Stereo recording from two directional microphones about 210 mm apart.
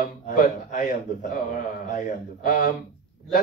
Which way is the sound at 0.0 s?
35° left (ahead or behind).